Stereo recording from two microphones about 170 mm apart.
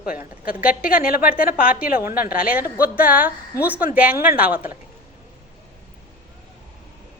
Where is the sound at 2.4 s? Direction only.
10° right (ahead or behind).